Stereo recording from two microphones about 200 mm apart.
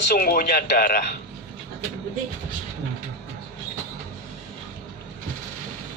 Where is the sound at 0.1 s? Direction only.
45° left (ahead or behind).